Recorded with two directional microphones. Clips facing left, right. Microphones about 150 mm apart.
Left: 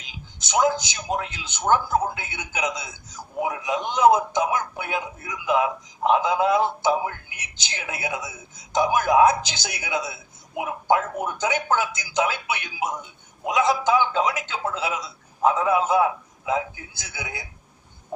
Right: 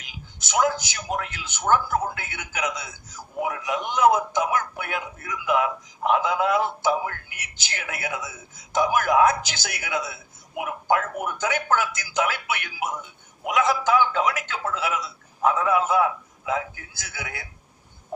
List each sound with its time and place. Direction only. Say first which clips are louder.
0.0 s speech: left 1 dB; 20° left (ahead or behind)